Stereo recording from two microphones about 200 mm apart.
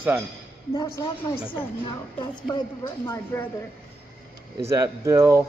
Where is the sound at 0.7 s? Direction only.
20° left (ahead or behind).